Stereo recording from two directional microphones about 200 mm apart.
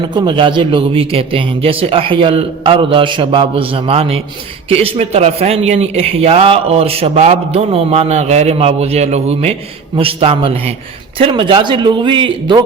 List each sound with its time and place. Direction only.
0.1 s a man's voice: 25° right (ahead or behind)